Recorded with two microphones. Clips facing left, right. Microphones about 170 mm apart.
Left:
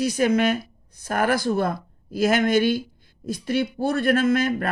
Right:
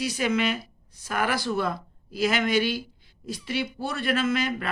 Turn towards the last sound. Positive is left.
turn(degrees=50)  # may be behind; listen again after turning